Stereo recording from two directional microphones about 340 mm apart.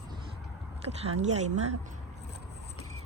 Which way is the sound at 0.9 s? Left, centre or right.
Centre.